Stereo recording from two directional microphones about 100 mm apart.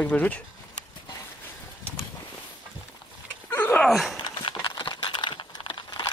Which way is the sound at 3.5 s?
20° left (ahead or behind).